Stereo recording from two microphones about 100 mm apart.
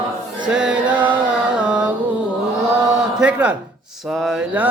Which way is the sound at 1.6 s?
10° right (ahead or behind).